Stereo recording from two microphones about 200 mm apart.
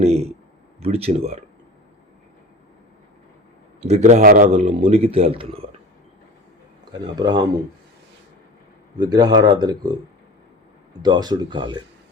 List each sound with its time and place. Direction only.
0.0 s a sound: 30° right (ahead or behind)
0.8 s a man's voice: 30° right (ahead or behind)
3.8 s a man's voice: 35° right (ahead or behind)
6.9 s speech: 20° right (ahead or behind)
9.0 s speech: 20° right (ahead or behind)
11.0 s speech: 20° right (ahead or behind)